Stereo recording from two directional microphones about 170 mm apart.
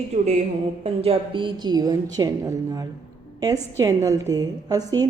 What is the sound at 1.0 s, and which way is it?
A woman's voice, 30° right (ahead or behind).